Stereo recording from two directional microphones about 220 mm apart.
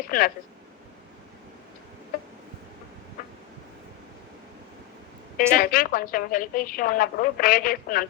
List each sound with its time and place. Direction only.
0.1 s a woman's voice: 40° left (ahead or behind)
5.5 s a woman's voice: 40° left (ahead or behind)